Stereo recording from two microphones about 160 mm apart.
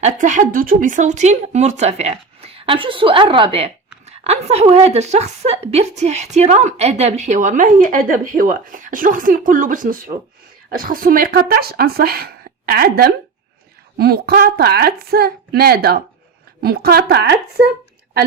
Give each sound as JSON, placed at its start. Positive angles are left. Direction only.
{"t": 0.0, "sound": "a woman's voice", "side_deg": -50}